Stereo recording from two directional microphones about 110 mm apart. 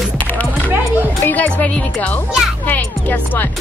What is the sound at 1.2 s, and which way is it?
Speech, 15° left (ahead or behind).